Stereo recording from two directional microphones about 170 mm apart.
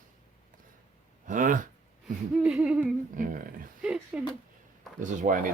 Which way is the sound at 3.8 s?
5° right (ahead or behind).